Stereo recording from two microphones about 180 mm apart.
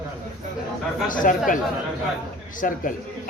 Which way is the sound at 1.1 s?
50° left (ahead or behind).